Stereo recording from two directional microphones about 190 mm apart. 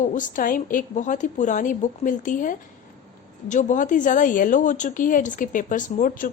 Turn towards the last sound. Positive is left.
turn(degrees=45)  # may be behind; listen again after turning